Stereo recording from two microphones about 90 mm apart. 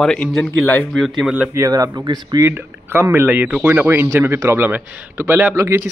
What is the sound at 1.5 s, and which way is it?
Speech, 35° right (ahead or behind).